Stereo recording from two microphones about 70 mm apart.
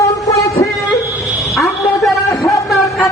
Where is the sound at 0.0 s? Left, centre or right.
Left.